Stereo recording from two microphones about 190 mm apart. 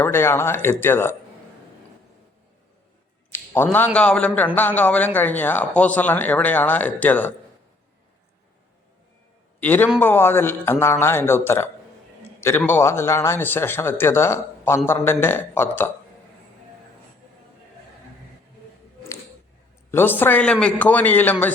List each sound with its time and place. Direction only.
0.0 s speech: 10° left (ahead or behind)
3.3 s a man's voice: 10° left (ahead or behind)
9.6 s a man's voice: 10° left (ahead or behind)
19.9 s speech: 10° left (ahead or behind)